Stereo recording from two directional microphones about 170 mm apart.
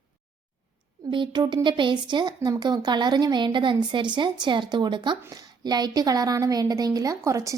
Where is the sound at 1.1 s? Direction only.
25° right (ahead or behind).